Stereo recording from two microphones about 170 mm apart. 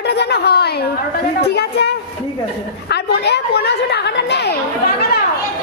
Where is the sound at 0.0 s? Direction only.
80° left.